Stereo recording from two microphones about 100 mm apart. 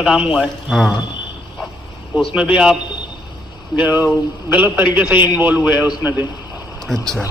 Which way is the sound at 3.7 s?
15° right (ahead or behind).